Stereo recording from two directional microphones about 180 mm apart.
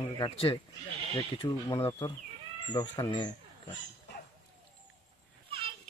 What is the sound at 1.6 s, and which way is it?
Speech, 15° left (ahead or behind).